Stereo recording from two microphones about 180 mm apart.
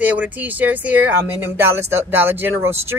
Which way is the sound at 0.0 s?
10° right (ahead or behind).